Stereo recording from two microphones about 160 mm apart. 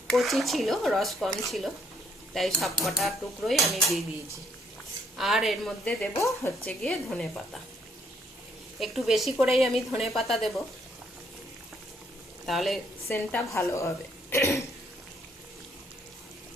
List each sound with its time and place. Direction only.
0.1 s dishes: centre (ahead or behind)
5.1 s dishes: centre (ahead or behind)
6.1 s speech: 20° left (ahead or behind)
6.7 s dishes: 5° left (ahead or behind)
8.8 s dishes: centre (ahead or behind)
12.5 s dishes: centre (ahead or behind)
13.1 s a woman's voice: 15° left (ahead or behind)